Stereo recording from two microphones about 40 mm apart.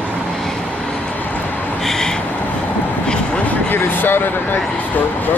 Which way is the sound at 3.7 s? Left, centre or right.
Left.